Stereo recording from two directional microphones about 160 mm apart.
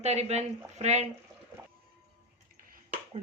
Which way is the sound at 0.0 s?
45° right (ahead or behind).